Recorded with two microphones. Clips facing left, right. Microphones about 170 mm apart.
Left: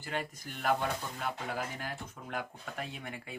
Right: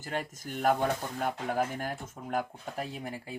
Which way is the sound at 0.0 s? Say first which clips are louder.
Right 2 dB; 45° right (ahead or behind).